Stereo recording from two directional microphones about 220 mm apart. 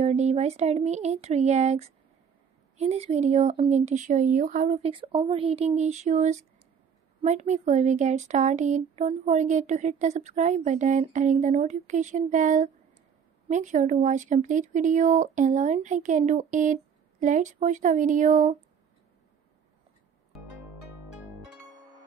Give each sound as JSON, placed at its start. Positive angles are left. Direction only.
{"t": 0.0, "sound": "speech", "side_deg": -30}